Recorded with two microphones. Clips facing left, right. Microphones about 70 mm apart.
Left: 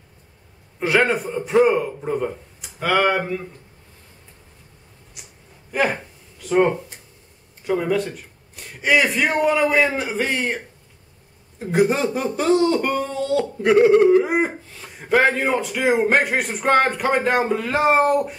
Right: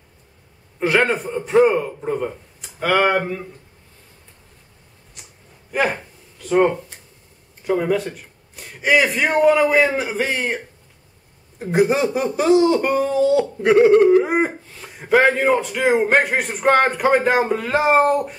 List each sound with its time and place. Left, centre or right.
0.7 s speech: centre
5.7 s a sound: centre
7.6 s speech: centre
11.6 s speech: centre